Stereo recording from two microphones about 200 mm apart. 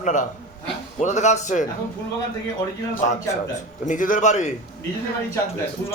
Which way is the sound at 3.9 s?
40° left (ahead or behind).